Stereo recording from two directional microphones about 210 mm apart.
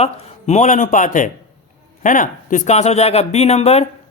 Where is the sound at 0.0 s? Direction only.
35° left (ahead or behind).